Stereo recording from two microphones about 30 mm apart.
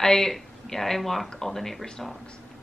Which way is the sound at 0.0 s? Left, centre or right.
Centre.